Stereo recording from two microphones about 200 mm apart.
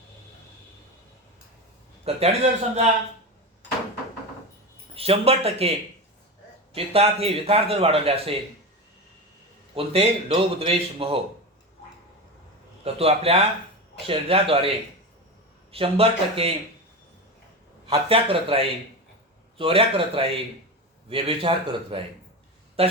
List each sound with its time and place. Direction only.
2.0 s a man's voice: 30° right (ahead or behind)
4.9 s a man's voice: 30° right (ahead or behind)
6.7 s a man's voice: 30° right (ahead or behind)
9.7 s a man's voice: 30° right (ahead or behind)
12.8 s a man's voice: 30° right (ahead or behind)
15.7 s a man's voice: 30° right (ahead or behind)
17.8 s a man's voice: 30° right (ahead or behind)